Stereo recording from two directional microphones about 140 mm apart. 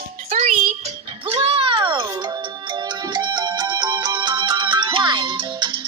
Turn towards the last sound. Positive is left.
turn(degrees=-35)  # may be behind; listen again after turning